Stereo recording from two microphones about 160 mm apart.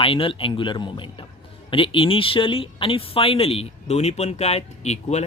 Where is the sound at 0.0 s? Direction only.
35° left (ahead or behind).